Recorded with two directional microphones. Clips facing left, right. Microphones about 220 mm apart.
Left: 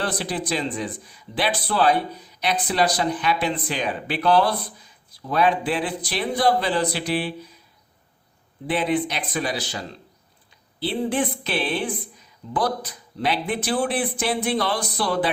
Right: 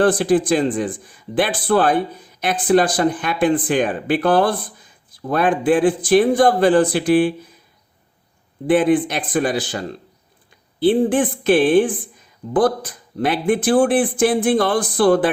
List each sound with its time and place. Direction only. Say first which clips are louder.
0.0 s speech: right 12 dB; 50° right (ahead or behind)
8.6 s speech: right 8 dB; 50° right (ahead or behind)